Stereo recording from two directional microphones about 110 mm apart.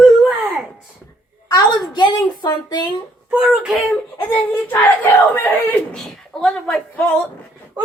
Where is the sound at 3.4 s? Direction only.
5° right (ahead or behind).